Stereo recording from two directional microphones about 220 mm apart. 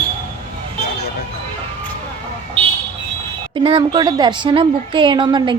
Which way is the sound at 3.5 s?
20° right (ahead or behind).